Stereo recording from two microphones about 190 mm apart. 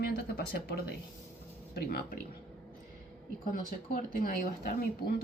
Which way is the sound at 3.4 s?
45° left (ahead or behind).